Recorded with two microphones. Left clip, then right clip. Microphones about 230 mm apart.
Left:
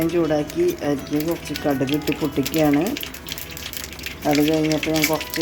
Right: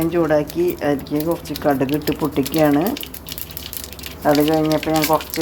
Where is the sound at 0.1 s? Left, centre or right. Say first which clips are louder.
Right 3 dB; centre.